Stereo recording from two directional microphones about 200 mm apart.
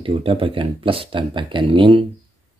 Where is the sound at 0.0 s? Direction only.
25° right (ahead or behind).